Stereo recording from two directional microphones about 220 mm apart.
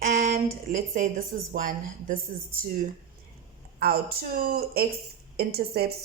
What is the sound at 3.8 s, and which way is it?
A man's voice, 45° right (ahead or behind).